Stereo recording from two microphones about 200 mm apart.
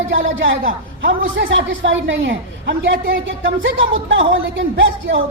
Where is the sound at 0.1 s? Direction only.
70° right (ahead or behind).